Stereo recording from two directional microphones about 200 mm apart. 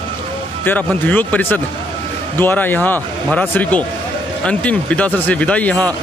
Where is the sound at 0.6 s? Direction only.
10° left (ahead or behind).